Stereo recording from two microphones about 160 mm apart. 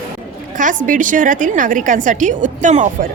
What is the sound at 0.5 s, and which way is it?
A woman's voice, 55° right (ahead or behind).